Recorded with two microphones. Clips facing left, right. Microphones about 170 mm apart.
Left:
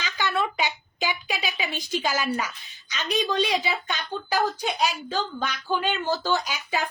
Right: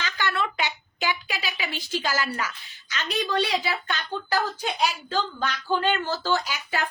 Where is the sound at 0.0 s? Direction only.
15° left (ahead or behind).